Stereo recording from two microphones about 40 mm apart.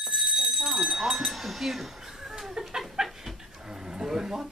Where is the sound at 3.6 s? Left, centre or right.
Centre.